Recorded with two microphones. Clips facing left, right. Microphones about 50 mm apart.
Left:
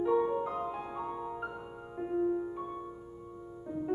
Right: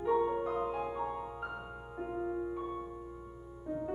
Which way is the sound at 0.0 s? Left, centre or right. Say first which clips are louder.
Left 2 dB; centre.